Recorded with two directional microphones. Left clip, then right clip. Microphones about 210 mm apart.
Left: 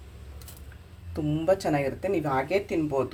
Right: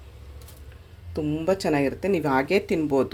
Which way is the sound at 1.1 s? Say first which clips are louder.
Even; 30° right (ahead or behind).